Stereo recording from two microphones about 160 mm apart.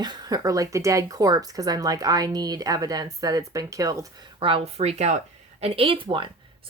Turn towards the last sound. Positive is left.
turn(degrees=-30)  # may be behind; listen again after turning